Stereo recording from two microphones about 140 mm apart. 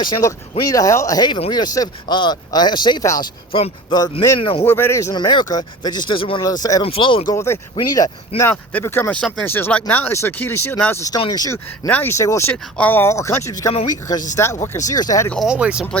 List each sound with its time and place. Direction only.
0.0 s speech: 35° left (ahead or behind)
3.5 s speech: 40° left (ahead or behind)
4.4 s speech: 40° left (ahead or behind)
4.6 s speech: 15° left (ahead or behind)
5.1 s speech: 35° left (ahead or behind)
6.4 s speech: 25° left (ahead or behind)
6.8 s speech: 40° left (ahead or behind)
7.3 s speech: 20° left (ahead or behind)
11.2 s speech: 30° left (ahead or behind)
11.9 s speech: 15° left (ahead or behind)
15.4 s speech: 5° right (ahead or behind)